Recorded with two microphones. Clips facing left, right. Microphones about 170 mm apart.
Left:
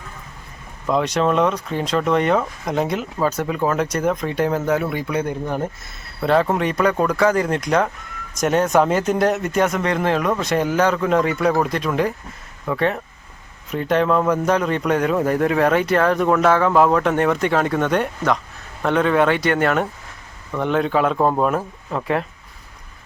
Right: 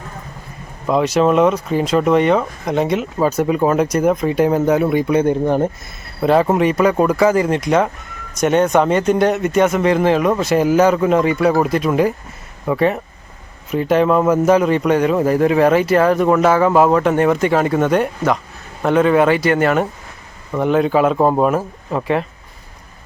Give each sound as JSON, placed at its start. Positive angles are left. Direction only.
{"t": 0.9, "sound": "a man's voice", "side_deg": -5}
{"t": 3.2, "sound": "speech", "side_deg": -10}
{"t": 6.2, "sound": "a man's voice", "side_deg": -10}